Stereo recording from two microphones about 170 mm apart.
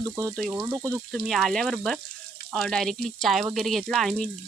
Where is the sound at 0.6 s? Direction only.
15° right (ahead or behind).